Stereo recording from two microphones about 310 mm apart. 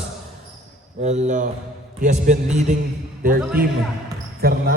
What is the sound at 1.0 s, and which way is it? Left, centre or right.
A man's voice, right.